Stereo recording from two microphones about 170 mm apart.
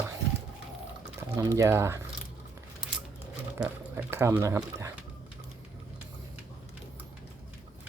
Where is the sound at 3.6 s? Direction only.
15° right (ahead or behind).